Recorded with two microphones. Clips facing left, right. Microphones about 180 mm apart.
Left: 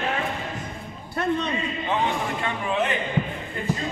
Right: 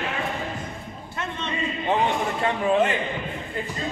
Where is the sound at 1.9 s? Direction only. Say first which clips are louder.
Right 2 dB; 45° right (ahead or behind).